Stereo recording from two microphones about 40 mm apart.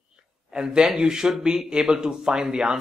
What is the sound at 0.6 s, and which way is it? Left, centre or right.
Speech, centre.